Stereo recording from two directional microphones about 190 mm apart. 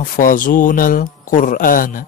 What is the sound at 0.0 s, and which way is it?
Speech, 45° left (ahead or behind).